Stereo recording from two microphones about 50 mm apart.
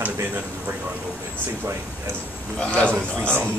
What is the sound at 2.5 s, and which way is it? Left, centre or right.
Speech, left.